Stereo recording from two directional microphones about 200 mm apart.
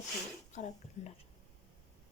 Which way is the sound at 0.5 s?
35° left (ahead or behind).